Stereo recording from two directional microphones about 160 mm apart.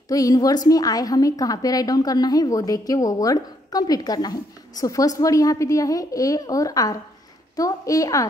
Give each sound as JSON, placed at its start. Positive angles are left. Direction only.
{"t": 0.1, "sound": "a woman's voice", "side_deg": 20}